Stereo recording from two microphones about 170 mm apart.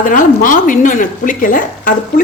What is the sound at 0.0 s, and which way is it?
A woman's voice, 50° left (ahead or behind).